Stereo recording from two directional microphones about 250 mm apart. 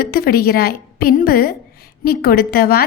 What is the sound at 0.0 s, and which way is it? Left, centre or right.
Speech, left.